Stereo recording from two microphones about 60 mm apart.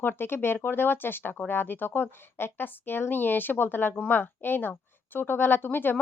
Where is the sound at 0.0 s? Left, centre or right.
Left.